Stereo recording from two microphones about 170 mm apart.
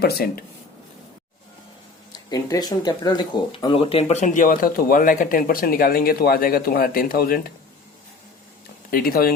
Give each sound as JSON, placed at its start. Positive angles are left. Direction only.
{"t": 0.0, "sound": "speech", "side_deg": 65}
{"t": 2.3, "sound": "speech", "side_deg": 25}
{"t": 8.9, "sound": "speech", "side_deg": 60}